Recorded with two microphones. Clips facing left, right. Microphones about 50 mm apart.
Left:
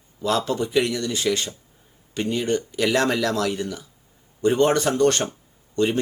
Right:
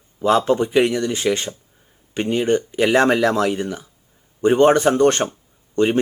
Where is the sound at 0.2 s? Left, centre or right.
Right.